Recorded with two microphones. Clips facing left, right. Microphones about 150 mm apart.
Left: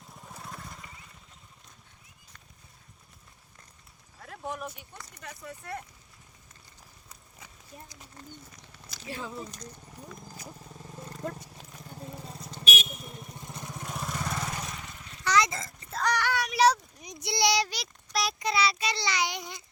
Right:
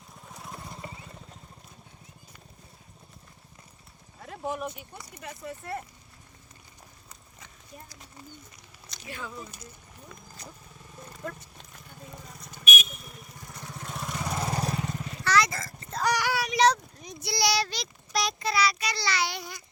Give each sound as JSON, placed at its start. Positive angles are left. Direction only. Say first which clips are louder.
{"t": 0.3, "sound": "vehicle", "louder": "even", "side_deg": 0}
{"t": 0.5, "sound": "vehicle", "louder": "right 4 dB", "side_deg": -20}
{"t": 4.2, "sound": "speech", "louder": "right 4 dB", "side_deg": -5}
{"t": 9.0, "sound": "speech", "louder": "left 2 dB", "side_deg": 30}
{"t": 11.9, "sound": "vehicle", "louder": "left 4 dB", "side_deg": 30}
{"t": 13.8, "sound": "vehicle", "louder": "even", "side_deg": 5}
{"t": 14.2, "sound": "vehicle", "louder": "right 3 dB", "side_deg": -15}
{"t": 14.4, "sound": "vehicle", "louder": "right 7 dB", "side_deg": -35}
{"t": 15.2, "sound": "a sound", "louder": "even", "side_deg": 20}
{"t": 16.0, "sound": "a sound", "louder": "right 1 dB", "side_deg": -10}
{"t": 18.1, "sound": "a sound", "louder": "right 1 dB", "side_deg": 0}
{"t": 18.3, "sound": "a child's voice", "louder": "even", "side_deg": 20}